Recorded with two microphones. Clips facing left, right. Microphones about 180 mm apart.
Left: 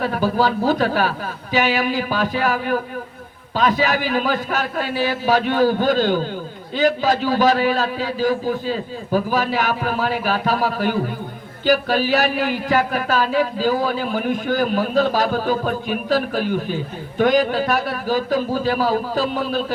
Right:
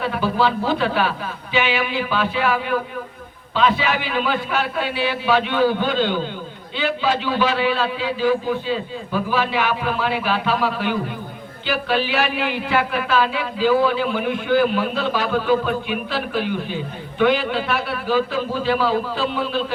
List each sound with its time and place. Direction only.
0.0 s speech: 40° left (ahead or behind)